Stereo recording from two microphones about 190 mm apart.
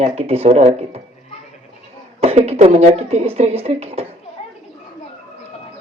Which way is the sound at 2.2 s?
35° right (ahead or behind).